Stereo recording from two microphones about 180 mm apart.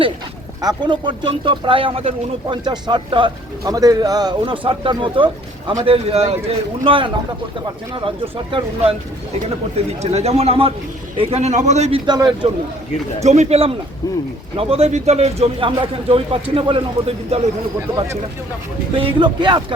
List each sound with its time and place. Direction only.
0.6 s a man's voice: 25° right (ahead or behind)
10.0 s speech: 35° right (ahead or behind)
13.1 s speech: 40° right (ahead or behind)
17.7 s speech: 15° right (ahead or behind)
18.9 s a man's voice: 30° right (ahead or behind)